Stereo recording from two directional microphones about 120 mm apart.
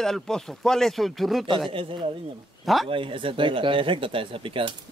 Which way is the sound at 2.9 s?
45° right (ahead or behind).